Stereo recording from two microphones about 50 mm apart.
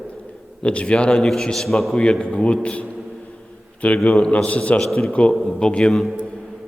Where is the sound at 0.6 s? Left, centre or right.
Left.